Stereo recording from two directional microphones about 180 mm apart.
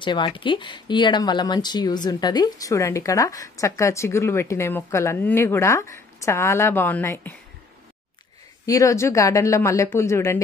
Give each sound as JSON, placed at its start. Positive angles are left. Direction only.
{"t": 0.0, "sound": "speech", "side_deg": 25}
{"t": 8.6, "sound": "speech", "side_deg": 20}